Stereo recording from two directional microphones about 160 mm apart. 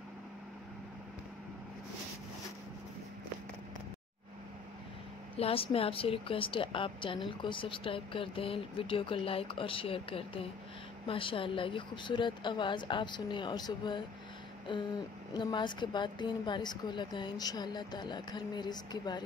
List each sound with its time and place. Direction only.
5.4 s a woman's voice: 35° left (ahead or behind)
15.3 s a woman's voice: 30° left (ahead or behind)